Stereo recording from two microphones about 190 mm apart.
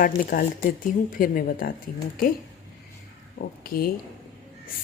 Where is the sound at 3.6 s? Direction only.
50° left (ahead or behind).